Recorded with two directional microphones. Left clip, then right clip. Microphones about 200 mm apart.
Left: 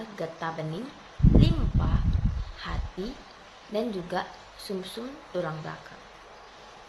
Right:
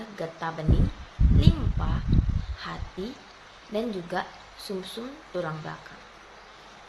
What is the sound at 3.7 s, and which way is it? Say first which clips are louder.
Speech: even; 5° right (ahead or behind).